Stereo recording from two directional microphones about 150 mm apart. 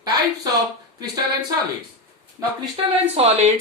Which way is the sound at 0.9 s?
25° right (ahead or behind).